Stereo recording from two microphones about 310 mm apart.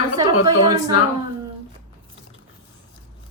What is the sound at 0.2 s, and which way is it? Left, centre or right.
Speech, centre.